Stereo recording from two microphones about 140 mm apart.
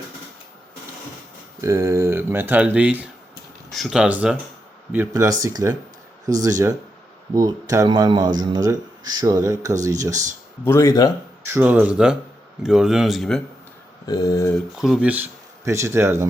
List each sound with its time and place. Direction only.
1.6 s speech: 20° right (ahead or behind); by 4.4 s 5° right (ahead or behind)
5.1 s speech: 25° right (ahead or behind)
10.6 s speech: 20° left (ahead or behind)
11.4 s speech: 15° right (ahead or behind)
14.1 s speech: 25° left (ahead or behind)
14.8 s speech: 5° right (ahead or behind)